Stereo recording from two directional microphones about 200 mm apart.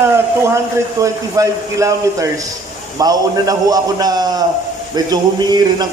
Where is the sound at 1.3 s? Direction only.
15° right (ahead or behind).